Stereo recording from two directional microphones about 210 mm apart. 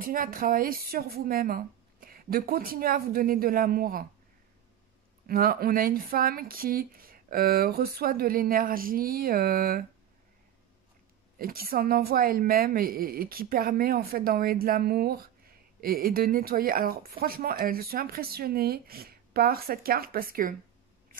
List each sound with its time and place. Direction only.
0.0 s a woman's voice: 40° right (ahead or behind)
5.3 s a woman's voice: 45° right (ahead or behind)
11.3 s a woman's voice: 45° right (ahead or behind)